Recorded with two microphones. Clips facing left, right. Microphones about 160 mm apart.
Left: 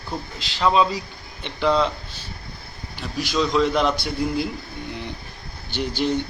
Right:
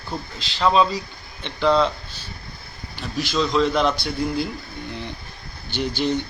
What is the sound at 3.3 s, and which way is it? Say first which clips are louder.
Speech: even; 5° left (ahead or behind).